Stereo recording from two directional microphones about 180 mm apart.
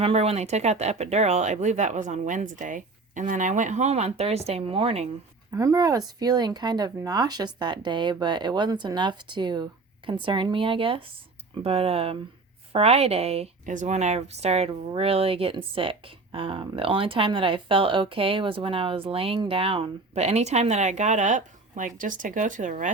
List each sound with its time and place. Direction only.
0.0 s speech: 35° right (ahead or behind)
5.5 s speech: 20° right (ahead or behind); by 22.9 s 45° right (ahead or behind)